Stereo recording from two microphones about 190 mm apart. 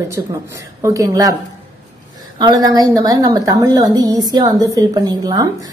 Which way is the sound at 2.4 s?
20° right (ahead or behind).